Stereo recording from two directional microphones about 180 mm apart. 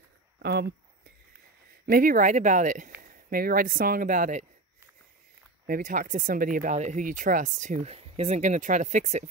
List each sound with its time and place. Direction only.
0.4 s speech: 65° right (ahead or behind)
1.9 s speech: 50° right (ahead or behind)
5.7 s speech: 50° right (ahead or behind)